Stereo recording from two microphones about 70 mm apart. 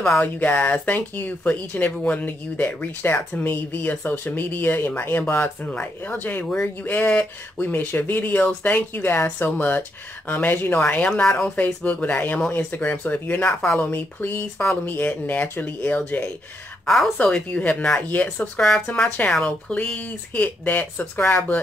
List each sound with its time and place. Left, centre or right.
0.2 s speech: left
5.7 s speech: left
16.8 s a woman's voice: centre
17.2 s speech: centre